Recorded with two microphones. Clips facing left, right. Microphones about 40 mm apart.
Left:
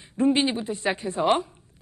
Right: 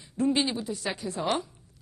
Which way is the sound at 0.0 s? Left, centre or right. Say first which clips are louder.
Left 4 dB; left.